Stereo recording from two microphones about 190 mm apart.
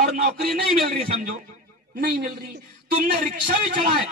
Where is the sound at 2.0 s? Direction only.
55° right (ahead or behind).